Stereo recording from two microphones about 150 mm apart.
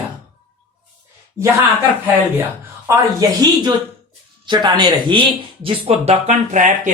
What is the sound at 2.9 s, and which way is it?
Speech, 25° right (ahead or behind).